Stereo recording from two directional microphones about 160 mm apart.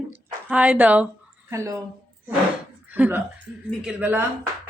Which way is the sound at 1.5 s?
20° right (ahead or behind).